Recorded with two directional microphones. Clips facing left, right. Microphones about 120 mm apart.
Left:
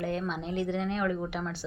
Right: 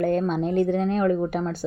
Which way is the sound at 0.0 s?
45° right (ahead or behind).